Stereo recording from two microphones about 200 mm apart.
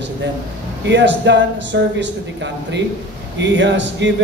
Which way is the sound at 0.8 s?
60° right (ahead or behind).